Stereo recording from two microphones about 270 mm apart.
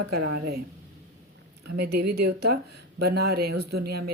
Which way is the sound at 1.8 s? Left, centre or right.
Right.